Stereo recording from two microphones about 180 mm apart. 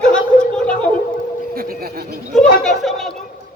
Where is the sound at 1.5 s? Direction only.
55° right (ahead or behind).